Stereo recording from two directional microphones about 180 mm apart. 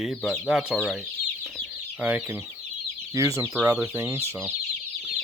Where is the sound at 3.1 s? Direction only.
15° right (ahead or behind).